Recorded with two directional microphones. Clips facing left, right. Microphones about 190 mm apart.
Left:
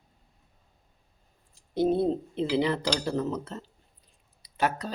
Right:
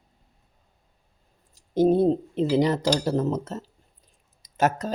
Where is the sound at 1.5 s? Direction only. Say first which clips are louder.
Right 5 dB; 40° right (ahead or behind).